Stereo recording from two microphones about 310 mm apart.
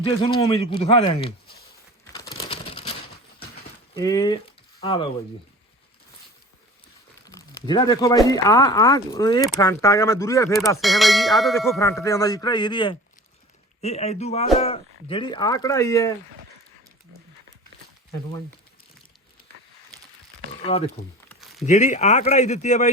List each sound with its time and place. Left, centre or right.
0.0 s speech: centre
2.1 s computer keyboard: centre
3.9 s speech: centre
7.3 s ding: centre
10.8 s ding: centre
13.8 s speech: left
15.0 s ding: centre
20.7 s speech: centre
21.2 s a sound: centre
21.7 s speech: left